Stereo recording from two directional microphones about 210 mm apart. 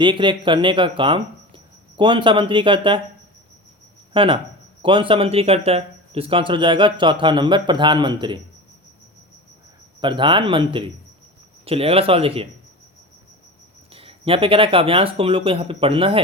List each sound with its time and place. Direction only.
0.0 s speech: 25° right (ahead or behind)
4.1 s speech: 25° right (ahead or behind)
10.0 s speech: 20° right (ahead or behind)
13.9 s speech: 25° right (ahead or behind)